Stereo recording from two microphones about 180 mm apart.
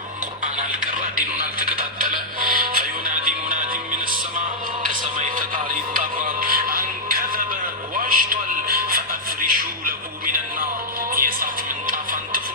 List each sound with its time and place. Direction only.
1.5 s music: 50° right (ahead or behind)
4.9 s music: 50° right (ahead or behind)
7.9 s a sound: 55° right (ahead or behind)
9.4 s music: 55° right (ahead or behind)